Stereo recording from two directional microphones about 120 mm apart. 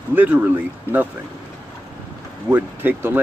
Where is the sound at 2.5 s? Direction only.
15° right (ahead or behind).